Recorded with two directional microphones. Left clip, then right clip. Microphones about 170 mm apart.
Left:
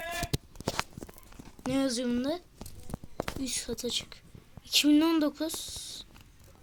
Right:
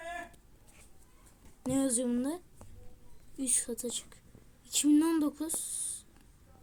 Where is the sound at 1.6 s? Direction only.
5° right (ahead or behind).